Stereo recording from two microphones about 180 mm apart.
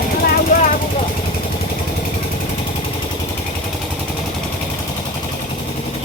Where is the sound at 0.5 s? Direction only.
50° left (ahead or behind).